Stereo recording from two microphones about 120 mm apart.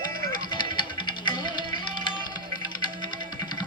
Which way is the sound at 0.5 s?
40° left (ahead or behind).